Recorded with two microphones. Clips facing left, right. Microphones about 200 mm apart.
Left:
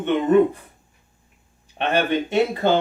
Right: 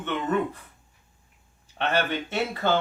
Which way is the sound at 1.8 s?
15° left (ahead or behind).